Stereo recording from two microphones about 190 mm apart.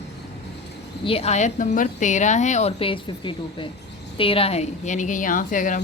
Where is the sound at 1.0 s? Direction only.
30° left (ahead or behind).